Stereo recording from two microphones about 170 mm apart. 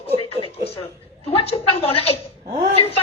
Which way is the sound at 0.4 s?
30° left (ahead or behind).